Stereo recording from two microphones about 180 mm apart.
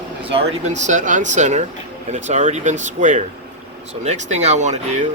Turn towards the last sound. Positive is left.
turn(degrees=-40)  # may be behind; listen again after turning